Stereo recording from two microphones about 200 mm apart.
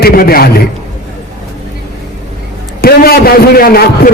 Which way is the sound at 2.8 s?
50° left (ahead or behind).